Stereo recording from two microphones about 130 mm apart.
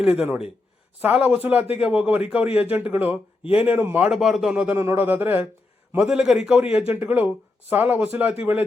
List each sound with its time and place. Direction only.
0.0 s a man's voice: 10° right (ahead or behind)
6.0 s a man's voice: 5° right (ahead or behind)